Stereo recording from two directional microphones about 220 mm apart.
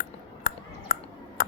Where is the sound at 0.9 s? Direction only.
40° left (ahead or behind).